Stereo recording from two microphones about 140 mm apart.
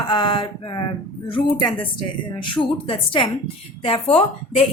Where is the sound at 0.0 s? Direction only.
35° left (ahead or behind).